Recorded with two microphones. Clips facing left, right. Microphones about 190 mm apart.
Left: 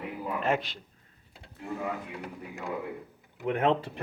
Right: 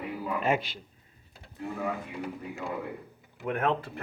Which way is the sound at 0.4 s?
Centre (ahead or behind).